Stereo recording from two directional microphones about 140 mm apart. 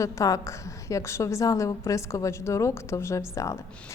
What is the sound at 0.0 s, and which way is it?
A woman's voice, 25° left (ahead or behind).